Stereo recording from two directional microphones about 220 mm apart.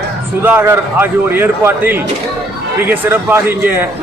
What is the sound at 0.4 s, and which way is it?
A man's voice, 10° right (ahead or behind).